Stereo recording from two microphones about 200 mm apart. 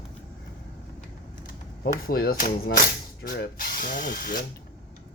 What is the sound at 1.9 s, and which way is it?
Speech, 50° left (ahead or behind).